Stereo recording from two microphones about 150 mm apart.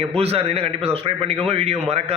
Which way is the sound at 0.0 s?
40° right (ahead or behind).